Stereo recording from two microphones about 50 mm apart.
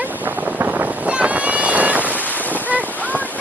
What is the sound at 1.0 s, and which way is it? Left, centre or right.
Boat, right.